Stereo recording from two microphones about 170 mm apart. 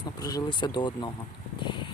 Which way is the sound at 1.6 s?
30° left (ahead or behind).